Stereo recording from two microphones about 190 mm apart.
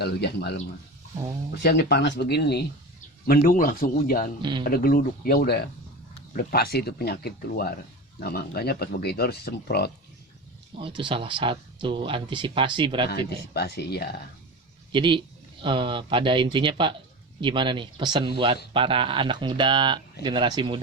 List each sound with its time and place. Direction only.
0.0 s speech: 60° left (ahead or behind)
1.5 s speech: 60° left (ahead or behind)
10.8 s speech: 25° right (ahead or behind)
13.1 s speech: 55° left (ahead or behind)
14.9 s speech: 25° right (ahead or behind)